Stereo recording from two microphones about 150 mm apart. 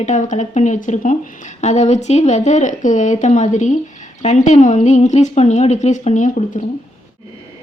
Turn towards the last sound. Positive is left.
turn(degrees=55)  # may be behind; listen again after turning